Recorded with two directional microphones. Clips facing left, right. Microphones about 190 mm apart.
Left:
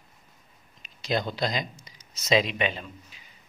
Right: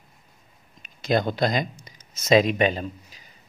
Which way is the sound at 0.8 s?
50° right (ahead or behind).